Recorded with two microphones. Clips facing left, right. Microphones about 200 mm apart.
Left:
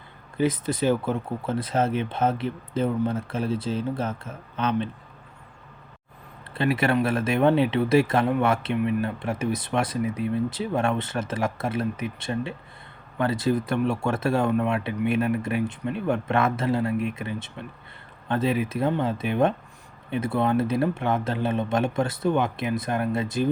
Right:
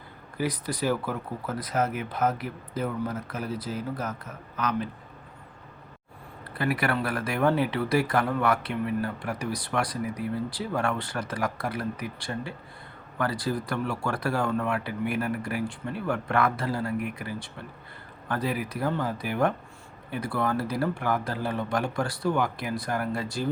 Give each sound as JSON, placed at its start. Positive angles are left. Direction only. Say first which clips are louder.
{"t": 0.3, "sound": "speech", "louder": "left 6 dB", "side_deg": 25}
{"t": 6.5, "sound": "speech", "louder": "left 4 dB", "side_deg": 25}